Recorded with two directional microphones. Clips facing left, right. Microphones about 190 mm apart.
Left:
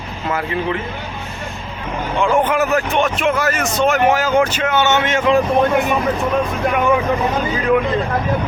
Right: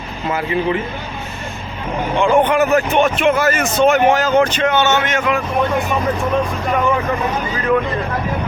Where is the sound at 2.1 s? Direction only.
Centre (ahead or behind).